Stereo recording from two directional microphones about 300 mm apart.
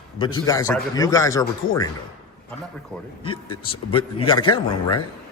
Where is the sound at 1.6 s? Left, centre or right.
Left.